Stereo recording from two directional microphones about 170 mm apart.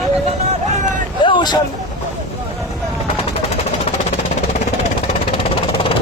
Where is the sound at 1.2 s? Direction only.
30° left (ahead or behind).